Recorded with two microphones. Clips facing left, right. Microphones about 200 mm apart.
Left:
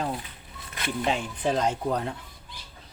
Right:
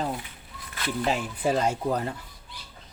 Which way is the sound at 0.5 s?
20° left (ahead or behind).